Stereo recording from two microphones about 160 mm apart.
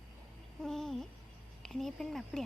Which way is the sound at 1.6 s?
Centre (ahead or behind).